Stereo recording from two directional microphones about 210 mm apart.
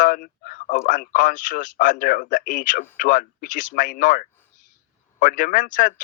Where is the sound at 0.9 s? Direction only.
40° left (ahead or behind).